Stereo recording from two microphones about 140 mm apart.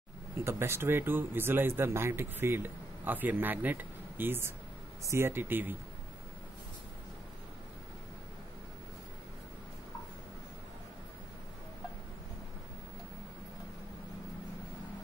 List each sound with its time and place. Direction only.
0.4 s speech: 20° right (ahead or behind)